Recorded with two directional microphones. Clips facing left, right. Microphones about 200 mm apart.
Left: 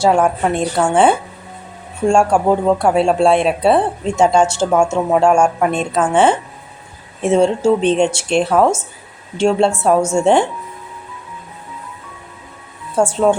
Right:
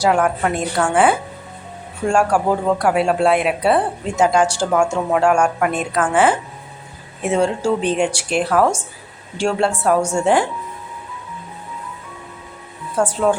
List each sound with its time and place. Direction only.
0.0 s speech: 25° left (ahead or behind)
13.0 s speech: 25° left (ahead or behind)